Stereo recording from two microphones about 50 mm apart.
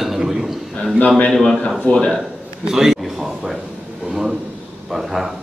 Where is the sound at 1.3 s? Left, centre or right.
Centre.